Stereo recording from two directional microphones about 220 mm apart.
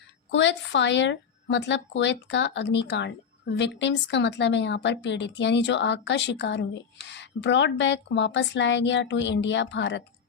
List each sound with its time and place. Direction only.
0.3 s a woman's voice: 55° left (ahead or behind)